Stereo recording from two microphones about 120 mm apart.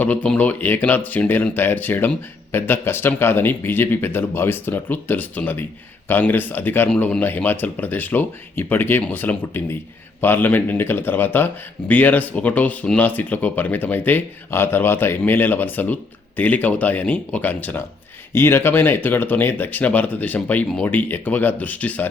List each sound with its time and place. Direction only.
0.0 s speech: 10° left (ahead or behind)